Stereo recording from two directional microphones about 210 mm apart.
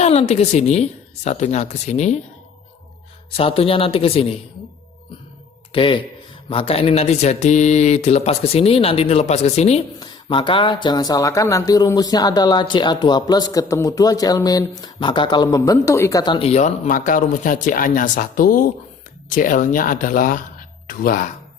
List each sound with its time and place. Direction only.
0.0 s speech: 30° left (ahead or behind)
3.3 s speech: 25° left (ahead or behind)
5.7 s speech: 25° left (ahead or behind); by 21.2 s 45° left (ahead or behind)